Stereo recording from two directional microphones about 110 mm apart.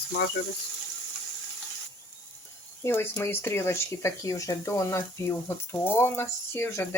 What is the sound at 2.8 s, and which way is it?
Speech, 20° left (ahead or behind).